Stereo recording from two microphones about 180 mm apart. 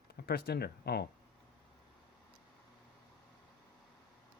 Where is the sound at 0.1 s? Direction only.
60° left (ahead or behind).